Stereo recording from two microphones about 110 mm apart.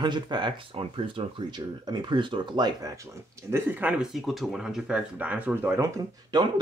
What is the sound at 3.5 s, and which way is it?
Speech, 20° right (ahead or behind).